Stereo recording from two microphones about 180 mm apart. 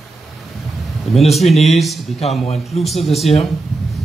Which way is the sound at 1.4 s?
Centre (ahead or behind).